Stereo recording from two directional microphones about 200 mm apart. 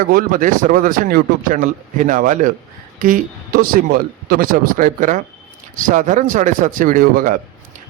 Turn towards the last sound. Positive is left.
turn(degrees=-45)  # may be behind; listen again after turning